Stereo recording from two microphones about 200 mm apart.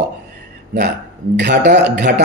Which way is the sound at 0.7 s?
55° right (ahead or behind).